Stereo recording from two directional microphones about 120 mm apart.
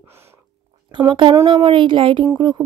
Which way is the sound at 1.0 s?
40° right (ahead or behind).